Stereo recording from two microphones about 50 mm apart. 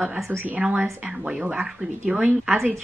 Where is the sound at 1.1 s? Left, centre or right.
Centre.